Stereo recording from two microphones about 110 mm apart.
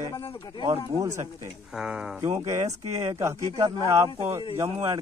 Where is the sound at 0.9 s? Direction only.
30° right (ahead or behind).